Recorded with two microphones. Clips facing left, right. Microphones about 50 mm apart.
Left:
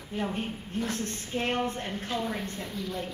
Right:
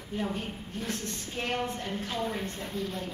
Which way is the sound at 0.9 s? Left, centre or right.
Left.